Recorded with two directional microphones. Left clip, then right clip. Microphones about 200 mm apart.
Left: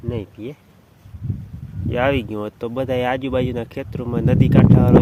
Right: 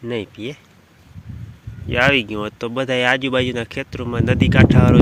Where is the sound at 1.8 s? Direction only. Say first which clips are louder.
Right 4 dB; 5° left (ahead or behind).